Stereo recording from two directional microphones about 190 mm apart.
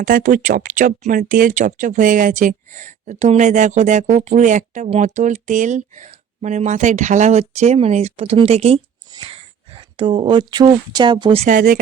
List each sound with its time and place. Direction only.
0.0 s speech: 45° right (ahead or behind); by 11.4 s 25° right (ahead or behind)
11.4 s speech: 45° right (ahead or behind)